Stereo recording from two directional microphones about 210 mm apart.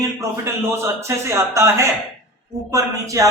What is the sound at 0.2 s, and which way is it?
Speech, 15° right (ahead or behind).